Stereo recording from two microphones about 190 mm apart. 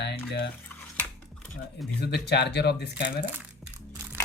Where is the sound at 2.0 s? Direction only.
60° left (ahead or behind).